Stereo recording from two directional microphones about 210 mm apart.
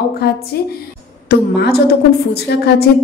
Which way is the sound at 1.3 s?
50° left (ahead or behind).